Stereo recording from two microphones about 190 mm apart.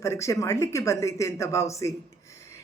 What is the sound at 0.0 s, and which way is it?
A woman's voice, 15° left (ahead or behind).